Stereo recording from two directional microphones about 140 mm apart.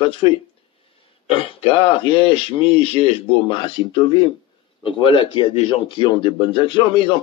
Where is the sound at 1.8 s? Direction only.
40° left (ahead or behind).